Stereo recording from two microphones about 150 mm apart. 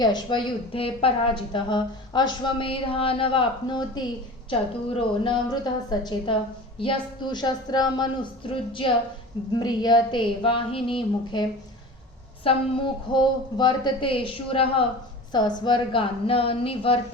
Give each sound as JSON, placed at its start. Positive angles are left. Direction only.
{"t": 0.0, "sound": "a woman's voice", "side_deg": 30}
{"t": 12.5, "sound": "a woman's voice", "side_deg": 30}